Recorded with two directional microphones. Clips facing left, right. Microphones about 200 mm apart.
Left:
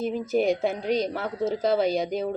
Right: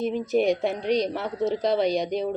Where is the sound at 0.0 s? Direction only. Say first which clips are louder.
Right 1 dB; centre (ahead or behind).